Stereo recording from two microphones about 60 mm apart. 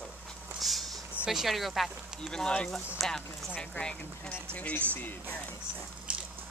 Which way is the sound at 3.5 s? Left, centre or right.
Left.